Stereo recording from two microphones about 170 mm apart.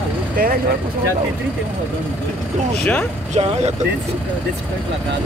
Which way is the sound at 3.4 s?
35° right (ahead or behind).